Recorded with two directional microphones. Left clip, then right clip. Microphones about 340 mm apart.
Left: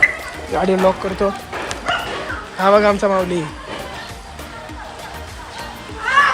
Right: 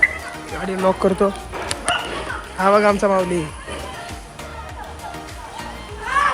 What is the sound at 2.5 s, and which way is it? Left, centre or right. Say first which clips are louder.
Speech: left 2 dB; centre.